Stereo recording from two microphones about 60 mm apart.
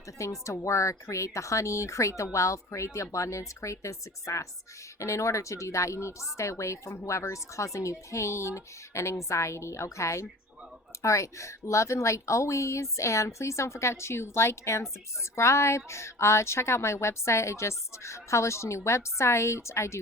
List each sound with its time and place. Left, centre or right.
0.2 s speech: left